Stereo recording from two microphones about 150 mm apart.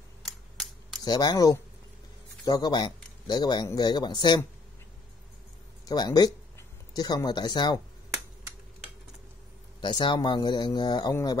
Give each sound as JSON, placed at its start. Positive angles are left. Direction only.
{"t": 1.0, "sound": "speech", "side_deg": 25}
{"t": 5.9, "sound": "speech", "side_deg": 25}
{"t": 9.8, "sound": "a man's voice", "side_deg": 30}